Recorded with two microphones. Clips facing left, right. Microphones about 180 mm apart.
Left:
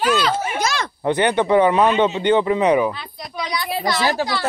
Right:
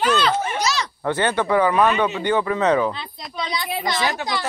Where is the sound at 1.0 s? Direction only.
20° left (ahead or behind).